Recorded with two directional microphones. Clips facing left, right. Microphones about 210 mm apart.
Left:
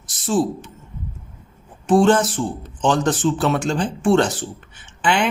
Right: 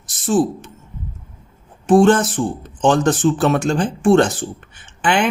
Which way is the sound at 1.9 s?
50° right (ahead or behind).